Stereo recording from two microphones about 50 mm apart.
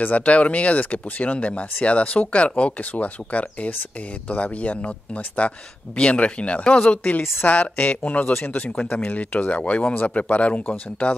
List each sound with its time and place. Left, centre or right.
0.0 s speech: left